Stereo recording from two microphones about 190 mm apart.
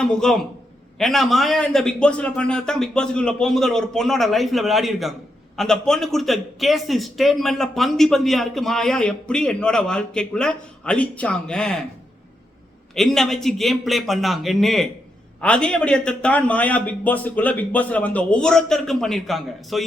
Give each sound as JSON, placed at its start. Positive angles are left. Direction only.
{"t": 0.0, "sound": "a man's voice", "side_deg": 5}
{"t": 12.9, "sound": "a man's voice", "side_deg": 0}